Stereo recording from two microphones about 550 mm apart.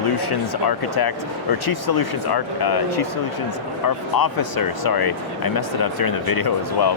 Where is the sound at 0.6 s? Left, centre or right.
Left.